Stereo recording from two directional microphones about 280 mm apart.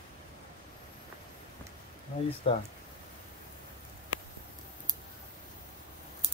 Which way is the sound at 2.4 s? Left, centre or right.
Left.